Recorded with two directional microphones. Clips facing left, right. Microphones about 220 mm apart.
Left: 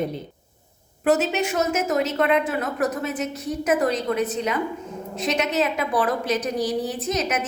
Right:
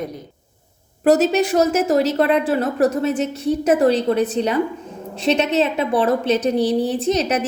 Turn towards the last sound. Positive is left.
turn(degrees=-30)  # may be behind; listen again after turning